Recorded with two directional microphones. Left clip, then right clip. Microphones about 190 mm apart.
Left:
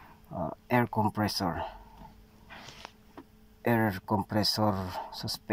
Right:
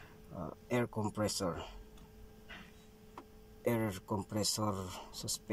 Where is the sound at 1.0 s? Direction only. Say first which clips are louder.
Left 7 dB; centre (ahead or behind).